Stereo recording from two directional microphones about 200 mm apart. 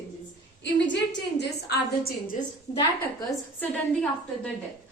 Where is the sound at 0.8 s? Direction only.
60° left (ahead or behind).